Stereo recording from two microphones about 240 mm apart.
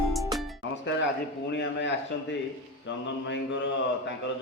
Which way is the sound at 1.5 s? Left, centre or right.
Left.